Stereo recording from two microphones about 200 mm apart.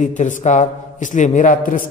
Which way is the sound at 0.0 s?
40° left (ahead or behind).